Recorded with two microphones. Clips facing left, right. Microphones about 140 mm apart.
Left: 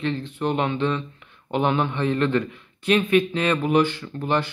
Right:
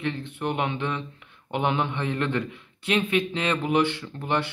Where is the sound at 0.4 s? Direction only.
15° right (ahead or behind).